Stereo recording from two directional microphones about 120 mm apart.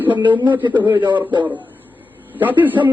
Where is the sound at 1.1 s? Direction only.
40° right (ahead or behind).